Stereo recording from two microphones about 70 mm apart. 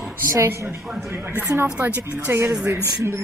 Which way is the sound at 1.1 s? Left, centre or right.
Right.